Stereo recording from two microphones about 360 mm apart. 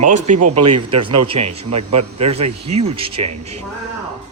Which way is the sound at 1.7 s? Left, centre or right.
Right.